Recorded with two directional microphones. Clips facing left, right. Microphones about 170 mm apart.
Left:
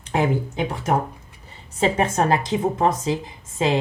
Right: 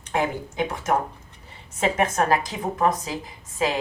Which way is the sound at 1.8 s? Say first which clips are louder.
Left 2 dB; 30° left (ahead or behind).